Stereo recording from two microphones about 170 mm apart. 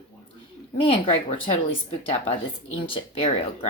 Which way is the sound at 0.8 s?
35° left (ahead or behind).